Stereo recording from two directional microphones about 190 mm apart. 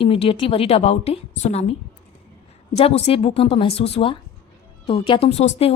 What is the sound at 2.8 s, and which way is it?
A woman's voice, 30° left (ahead or behind).